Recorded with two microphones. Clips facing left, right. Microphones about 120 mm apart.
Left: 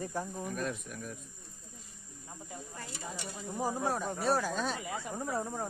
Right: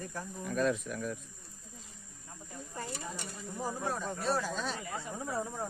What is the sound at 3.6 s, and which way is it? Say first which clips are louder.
Speech: left 3 dB; 10° left (ahead or behind).